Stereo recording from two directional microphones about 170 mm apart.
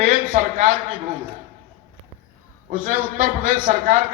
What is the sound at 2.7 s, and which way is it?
A man's voice, 50° right (ahead or behind).